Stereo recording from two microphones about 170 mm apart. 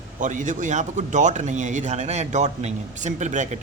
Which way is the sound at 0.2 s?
50° right (ahead or behind).